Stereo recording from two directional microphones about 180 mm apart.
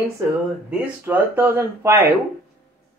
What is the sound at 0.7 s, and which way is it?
Speech, 10° right (ahead or behind).